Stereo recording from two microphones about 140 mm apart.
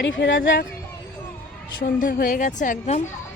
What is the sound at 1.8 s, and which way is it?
A woman's voice, 90° left.